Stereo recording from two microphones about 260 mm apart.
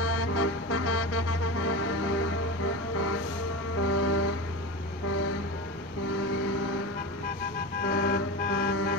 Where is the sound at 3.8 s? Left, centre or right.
Left.